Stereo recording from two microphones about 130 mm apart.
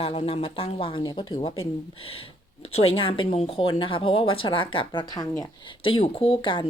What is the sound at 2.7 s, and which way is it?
Speech, 45° left (ahead or behind).